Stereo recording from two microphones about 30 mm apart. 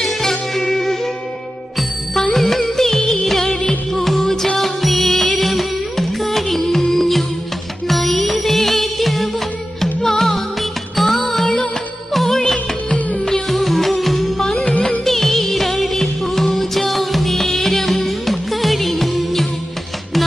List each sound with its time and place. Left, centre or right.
0.0 s music: centre
2.3 s music: centre
9.8 s music: centre
13.5 s music: centre
14.7 s music: left
15.0 s music: centre